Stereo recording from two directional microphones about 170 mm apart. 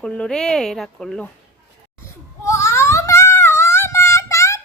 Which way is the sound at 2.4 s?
15° left (ahead or behind).